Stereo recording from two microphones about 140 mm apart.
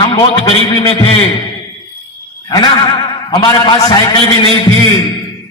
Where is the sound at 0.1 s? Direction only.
40° left (ahead or behind).